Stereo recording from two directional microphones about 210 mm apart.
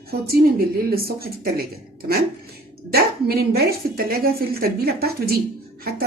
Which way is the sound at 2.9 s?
50° right (ahead or behind).